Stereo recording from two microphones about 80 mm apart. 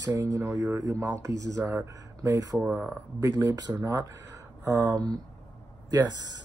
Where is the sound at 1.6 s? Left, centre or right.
Centre.